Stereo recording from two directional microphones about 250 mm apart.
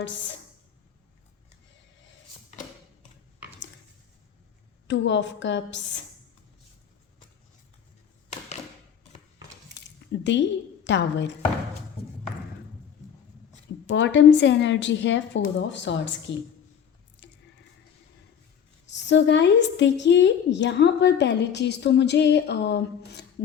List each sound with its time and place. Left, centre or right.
4.9 s a woman's voice: left
9.7 s squish: left
10.8 s a woman's voice: left
13.9 s a woman's voice: left
18.9 s a woman's voice: left